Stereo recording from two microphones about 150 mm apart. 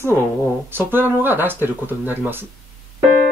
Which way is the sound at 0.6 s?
15° right (ahead or behind).